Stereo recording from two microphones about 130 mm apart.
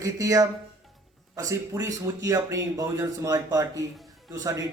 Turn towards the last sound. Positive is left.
turn(degrees=-25)  # may be behind; listen again after turning